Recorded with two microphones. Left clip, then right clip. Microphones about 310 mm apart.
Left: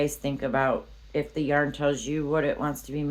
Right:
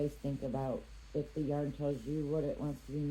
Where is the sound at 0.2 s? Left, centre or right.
Left.